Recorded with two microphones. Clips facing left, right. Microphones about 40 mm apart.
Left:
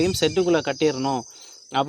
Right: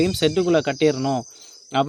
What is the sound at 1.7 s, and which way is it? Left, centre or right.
Speech, centre.